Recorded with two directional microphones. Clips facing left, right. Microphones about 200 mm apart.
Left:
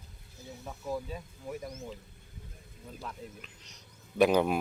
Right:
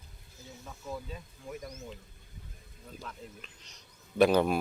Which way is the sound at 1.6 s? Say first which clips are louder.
Left 3 dB; 25° left (ahead or behind).